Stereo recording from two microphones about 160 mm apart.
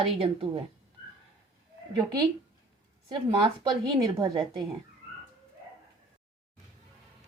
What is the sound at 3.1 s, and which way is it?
A woman's voice, 30° right (ahead or behind).